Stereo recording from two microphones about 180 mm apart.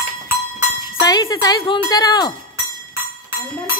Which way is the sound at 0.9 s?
25° left (ahead or behind).